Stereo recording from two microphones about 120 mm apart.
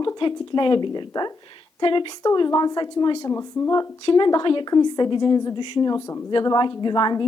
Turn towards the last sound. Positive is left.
turn(degrees=35)  # may be behind; listen again after turning